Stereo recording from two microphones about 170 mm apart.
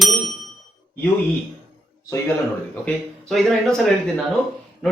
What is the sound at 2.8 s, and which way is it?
Speech, centre (ahead or behind).